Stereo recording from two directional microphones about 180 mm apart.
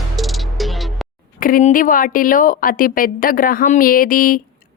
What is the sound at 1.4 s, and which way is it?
A woman's voice, 45° left (ahead or behind).